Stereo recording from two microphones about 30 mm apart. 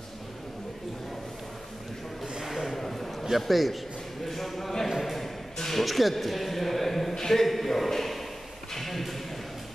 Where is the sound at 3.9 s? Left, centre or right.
Centre.